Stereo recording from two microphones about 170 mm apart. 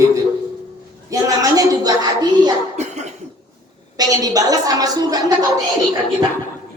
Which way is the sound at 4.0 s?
20° right (ahead or behind).